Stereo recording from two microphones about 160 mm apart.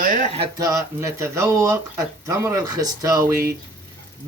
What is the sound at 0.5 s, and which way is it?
Speech, 20° right (ahead or behind).